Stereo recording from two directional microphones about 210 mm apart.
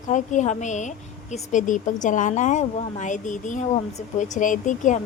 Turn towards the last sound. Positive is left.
turn(degrees=35)  # may be behind; listen again after turning